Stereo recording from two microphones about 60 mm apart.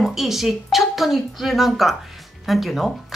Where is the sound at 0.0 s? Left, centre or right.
Centre.